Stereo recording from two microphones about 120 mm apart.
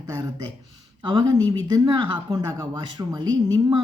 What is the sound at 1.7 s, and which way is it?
A woman's voice, 30° right (ahead or behind).